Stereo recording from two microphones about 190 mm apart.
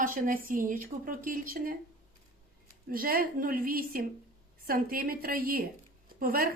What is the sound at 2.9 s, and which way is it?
A woman's voice, 50° right (ahead or behind).